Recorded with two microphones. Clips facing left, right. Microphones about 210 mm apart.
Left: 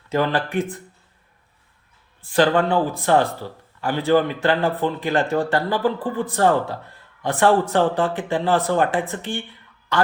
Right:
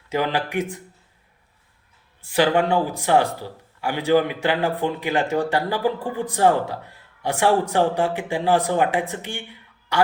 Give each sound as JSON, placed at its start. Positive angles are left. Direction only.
{"t": 0.1, "sound": "a man's voice", "side_deg": -15}
{"t": 2.2, "sound": "a man's voice", "side_deg": -10}